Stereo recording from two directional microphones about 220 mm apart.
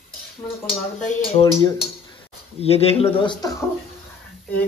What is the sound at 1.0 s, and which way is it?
Speech, 30° left (ahead or behind).